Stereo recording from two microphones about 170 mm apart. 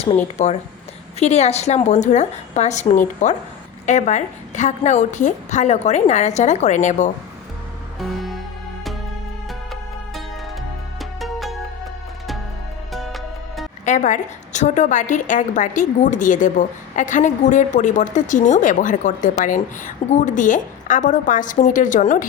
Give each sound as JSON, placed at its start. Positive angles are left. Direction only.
{"t": 0.4, "sound": "a woman's voice", "side_deg": 40}
{"t": 7.9, "sound": "music", "side_deg": 0}
{"t": 11.2, "sound": "music", "side_deg": 0}
{"t": 12.9, "sound": "music", "side_deg": 0}
{"t": 13.8, "sound": "a woman's voice", "side_deg": 45}